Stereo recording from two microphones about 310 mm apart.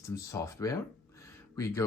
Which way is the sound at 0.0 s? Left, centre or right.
Centre.